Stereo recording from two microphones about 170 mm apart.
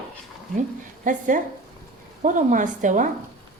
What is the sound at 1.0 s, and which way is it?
A woman's voice, 50° right (ahead or behind).